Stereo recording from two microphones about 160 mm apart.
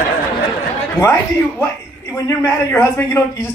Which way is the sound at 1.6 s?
20° left (ahead or behind).